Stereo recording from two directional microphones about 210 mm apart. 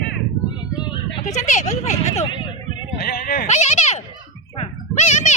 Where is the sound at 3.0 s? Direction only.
45° left (ahead or behind).